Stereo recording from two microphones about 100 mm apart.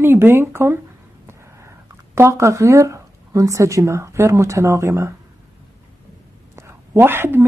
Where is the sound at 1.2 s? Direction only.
25° right (ahead or behind).